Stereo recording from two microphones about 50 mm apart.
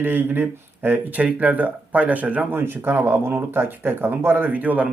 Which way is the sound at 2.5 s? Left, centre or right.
Right.